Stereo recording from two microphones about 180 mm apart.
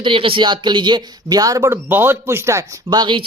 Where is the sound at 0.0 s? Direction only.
30° right (ahead or behind).